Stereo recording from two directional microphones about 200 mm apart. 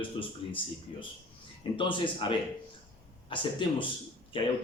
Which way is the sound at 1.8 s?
25° left (ahead or behind).